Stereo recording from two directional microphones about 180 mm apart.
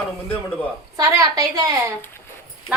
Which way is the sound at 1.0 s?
20° right (ahead or behind).